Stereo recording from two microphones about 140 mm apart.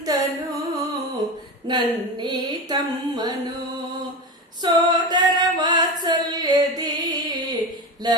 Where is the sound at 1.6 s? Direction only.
30° right (ahead or behind).